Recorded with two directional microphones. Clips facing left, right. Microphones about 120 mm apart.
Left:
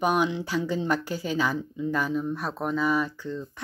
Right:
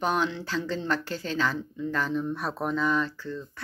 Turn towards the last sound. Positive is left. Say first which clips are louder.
# left 2 dB
turn(degrees=15)  # may be behind; listen again after turning